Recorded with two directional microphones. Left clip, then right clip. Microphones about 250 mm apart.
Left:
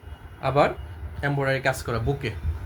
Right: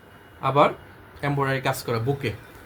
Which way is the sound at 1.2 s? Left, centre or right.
Centre.